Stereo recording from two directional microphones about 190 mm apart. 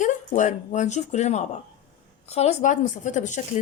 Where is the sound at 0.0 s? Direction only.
40° left (ahead or behind).